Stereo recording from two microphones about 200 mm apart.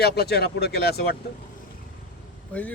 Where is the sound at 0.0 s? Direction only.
55° left (ahead or behind).